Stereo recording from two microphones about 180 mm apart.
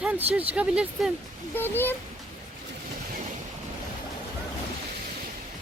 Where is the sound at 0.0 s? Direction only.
5° right (ahead or behind).